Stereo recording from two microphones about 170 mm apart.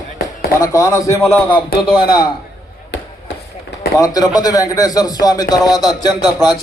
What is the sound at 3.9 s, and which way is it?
A man's voice, 20° left (ahead or behind).